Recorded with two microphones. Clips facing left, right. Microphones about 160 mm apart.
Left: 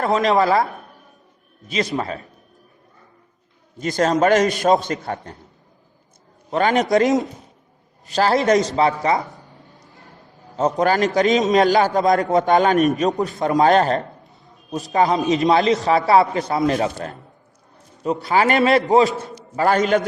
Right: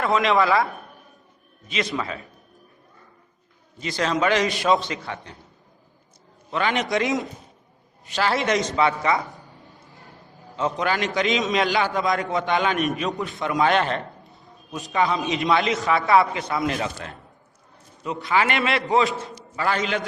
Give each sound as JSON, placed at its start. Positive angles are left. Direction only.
{"t": 0.0, "sound": "a man's voice", "side_deg": 40}
{"t": 3.8, "sound": "a man's voice", "side_deg": 45}
{"t": 6.5, "sound": "a man's voice", "side_deg": 40}
{"t": 10.6, "sound": "a man's voice", "side_deg": 40}